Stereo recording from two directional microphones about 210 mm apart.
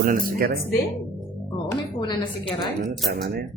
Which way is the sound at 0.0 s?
40° right (ahead or behind).